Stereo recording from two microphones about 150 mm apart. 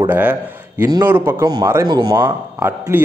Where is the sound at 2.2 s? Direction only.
15° right (ahead or behind).